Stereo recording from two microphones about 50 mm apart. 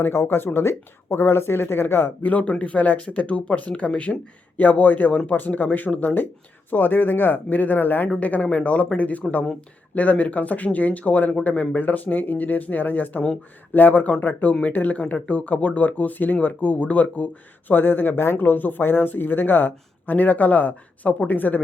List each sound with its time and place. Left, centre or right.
0.0 s speech: left
2.4 s speech: left
8.2 s speech: left
17.7 s speech: left